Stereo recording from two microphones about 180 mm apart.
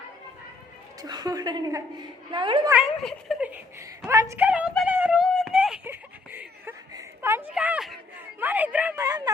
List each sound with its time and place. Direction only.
1.0 s a woman's voice: 20° right (ahead or behind)
3.0 s speech: centre (ahead or behind)
3.4 s a woman's voice: 10° right (ahead or behind)
5.3 s a sound: centre (ahead or behind); by 9.3 s 20° right (ahead or behind)